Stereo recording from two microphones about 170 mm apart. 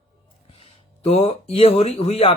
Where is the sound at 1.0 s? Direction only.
35° left (ahead or behind).